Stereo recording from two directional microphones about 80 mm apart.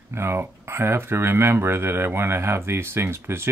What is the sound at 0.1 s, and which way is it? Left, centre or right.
Speech, right.